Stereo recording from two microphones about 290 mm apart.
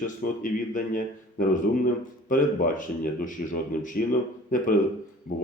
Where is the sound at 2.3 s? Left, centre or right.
Left.